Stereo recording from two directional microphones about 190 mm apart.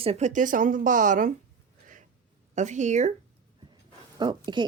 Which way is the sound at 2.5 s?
40° right (ahead or behind).